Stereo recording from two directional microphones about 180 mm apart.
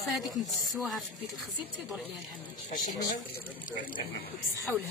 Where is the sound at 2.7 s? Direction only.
45° left (ahead or behind).